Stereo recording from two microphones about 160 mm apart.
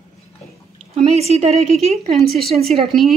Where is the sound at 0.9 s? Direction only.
40° right (ahead or behind).